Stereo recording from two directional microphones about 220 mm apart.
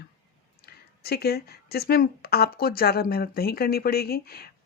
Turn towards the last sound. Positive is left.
turn(degrees=45)  # may be behind; listen again after turning